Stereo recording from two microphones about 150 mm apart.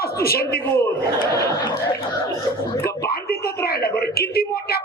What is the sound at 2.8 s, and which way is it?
A woman's voice, 90° left.